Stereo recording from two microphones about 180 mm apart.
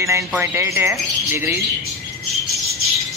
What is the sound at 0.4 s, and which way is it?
Speech, 15° right (ahead or behind).